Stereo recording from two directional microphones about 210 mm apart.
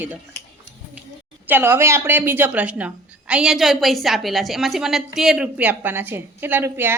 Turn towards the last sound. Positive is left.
turn(degrees=-10)  # may be behind; listen again after turning